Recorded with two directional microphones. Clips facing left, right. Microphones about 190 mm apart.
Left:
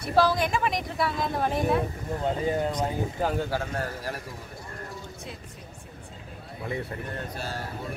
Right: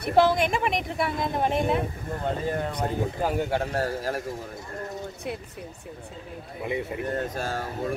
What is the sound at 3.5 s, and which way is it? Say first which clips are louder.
Speech: right 4 dB; 35° right (ahead or behind).